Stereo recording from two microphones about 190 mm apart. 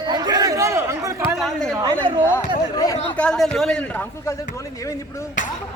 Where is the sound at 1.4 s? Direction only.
Centre (ahead or behind).